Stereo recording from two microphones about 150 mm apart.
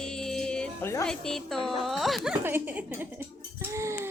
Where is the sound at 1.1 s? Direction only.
5° left (ahead or behind).